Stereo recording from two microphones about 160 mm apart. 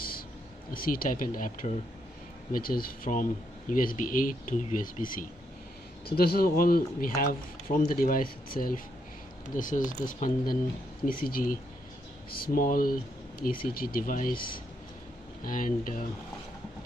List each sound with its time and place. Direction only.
0.7 s speech: 65° left (ahead or behind)
6.1 s speech: 75° left (ahead or behind)
14.3 s speech: 30° left (ahead or behind)
15.4 s speech: 60° left (ahead or behind)